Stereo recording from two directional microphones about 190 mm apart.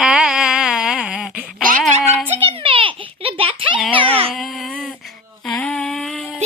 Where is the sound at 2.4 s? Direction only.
30° right (ahead or behind).